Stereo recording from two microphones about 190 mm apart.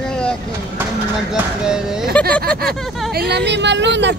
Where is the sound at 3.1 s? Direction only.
60° right (ahead or behind).